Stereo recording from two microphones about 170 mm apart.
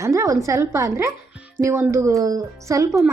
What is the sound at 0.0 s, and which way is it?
Speech, 15° right (ahead or behind).